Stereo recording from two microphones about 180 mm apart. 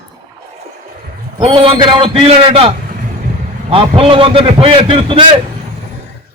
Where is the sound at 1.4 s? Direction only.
30° right (ahead or behind).